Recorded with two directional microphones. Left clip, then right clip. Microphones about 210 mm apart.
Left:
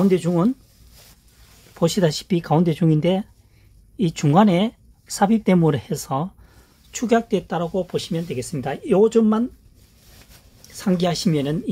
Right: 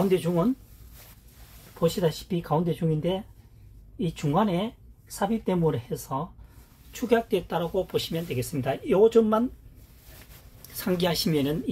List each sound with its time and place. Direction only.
0.1 s speech: 50° left (ahead or behind)
1.8 s speech: 60° left (ahead or behind)
10.7 s speech: 45° left (ahead or behind)